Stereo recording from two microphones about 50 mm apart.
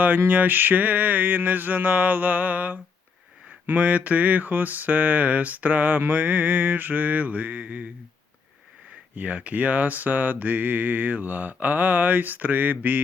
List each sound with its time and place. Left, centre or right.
0.3 s speech: right
3.8 s speech: right
9.1 s speech: right